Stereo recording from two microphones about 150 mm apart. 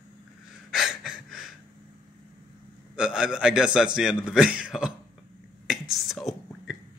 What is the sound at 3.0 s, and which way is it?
A man's voice, 5° right (ahead or behind).